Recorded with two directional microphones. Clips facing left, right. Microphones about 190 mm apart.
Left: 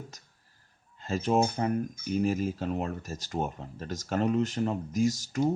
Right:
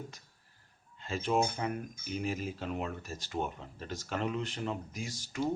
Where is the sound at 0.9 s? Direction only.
40° left (ahead or behind).